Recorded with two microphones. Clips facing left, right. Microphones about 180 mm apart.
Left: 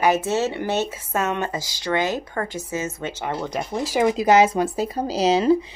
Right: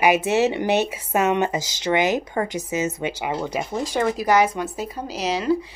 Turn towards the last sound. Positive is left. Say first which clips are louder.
# left 5 dB
turn(degrees=25)  # may be behind; listen again after turning